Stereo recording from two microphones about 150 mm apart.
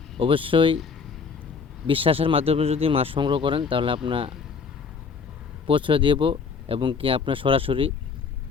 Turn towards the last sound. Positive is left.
turn(degrees=-35)  # may be behind; listen again after turning